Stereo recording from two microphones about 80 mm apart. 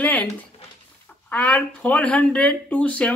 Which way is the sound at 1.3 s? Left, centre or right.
Centre.